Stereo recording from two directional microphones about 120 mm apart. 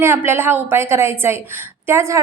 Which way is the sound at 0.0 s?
20° right (ahead or behind).